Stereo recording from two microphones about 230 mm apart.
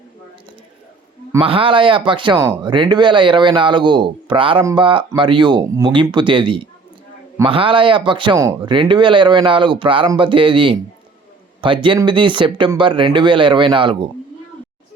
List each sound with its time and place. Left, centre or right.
1.4 s speech: right